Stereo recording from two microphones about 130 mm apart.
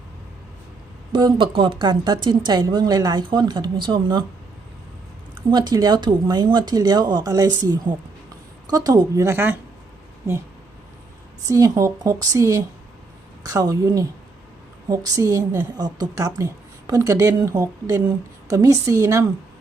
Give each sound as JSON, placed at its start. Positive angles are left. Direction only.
{"t": 1.1, "sound": "speech", "side_deg": -40}
{"t": 5.5, "sound": "a woman's voice", "side_deg": -35}
{"t": 11.4, "sound": "a woman's voice", "side_deg": -25}